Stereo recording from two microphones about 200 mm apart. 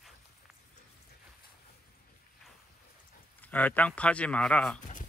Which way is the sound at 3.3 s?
10° left (ahead or behind).